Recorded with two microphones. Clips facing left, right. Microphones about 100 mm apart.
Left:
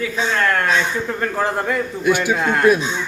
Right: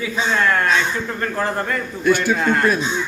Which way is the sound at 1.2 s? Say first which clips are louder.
Left 1 dB; 5° left (ahead or behind).